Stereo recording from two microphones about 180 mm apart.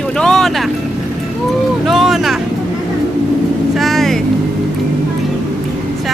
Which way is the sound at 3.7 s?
Centre (ahead or behind).